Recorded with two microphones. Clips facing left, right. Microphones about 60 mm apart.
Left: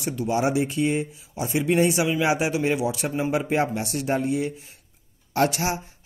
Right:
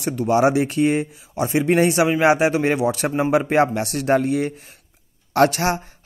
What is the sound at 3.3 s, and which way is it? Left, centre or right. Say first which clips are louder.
A man's voice: right 7 dB; right.